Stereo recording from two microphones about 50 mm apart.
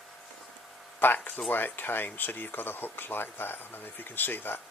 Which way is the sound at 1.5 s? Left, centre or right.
Left.